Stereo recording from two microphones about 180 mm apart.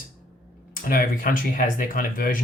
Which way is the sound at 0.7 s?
50° left (ahead or behind).